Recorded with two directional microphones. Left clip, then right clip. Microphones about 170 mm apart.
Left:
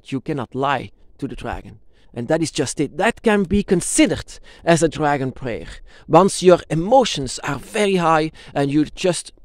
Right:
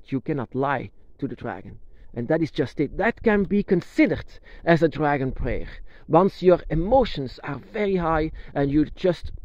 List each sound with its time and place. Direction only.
0.0 s speech: 20° left (ahead or behind)